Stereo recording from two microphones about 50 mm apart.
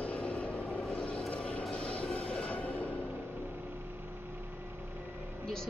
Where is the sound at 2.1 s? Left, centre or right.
Centre.